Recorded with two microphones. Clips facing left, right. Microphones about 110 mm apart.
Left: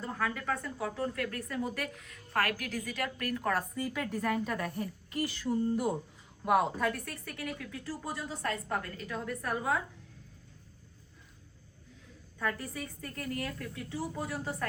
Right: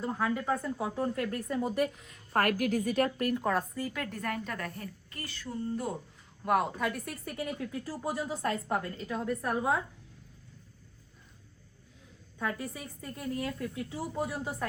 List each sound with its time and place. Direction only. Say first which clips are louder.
0.0 s a woman's voice: right 3 dB; 15° right (ahead or behind)
2.6 s a woman's voice: right 9 dB; 50° right (ahead or behind)
3.2 s speech: right 3 dB; 20° right (ahead or behind)
3.5 s a woman's voice: right 1 dB; 5° left (ahead or behind)
6.4 s speech: left 1 dB; centre (ahead or behind)
7.0 s a woman's voice: right 3 dB; 20° right (ahead or behind)
12.4 s a woman's voice: even; 15° right (ahead or behind)